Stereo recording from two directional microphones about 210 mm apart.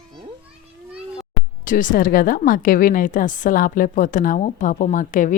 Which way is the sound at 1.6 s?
40° left (ahead or behind).